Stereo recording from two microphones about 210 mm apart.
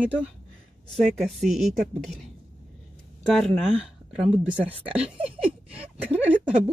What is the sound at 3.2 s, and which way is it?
Speech, centre (ahead or behind).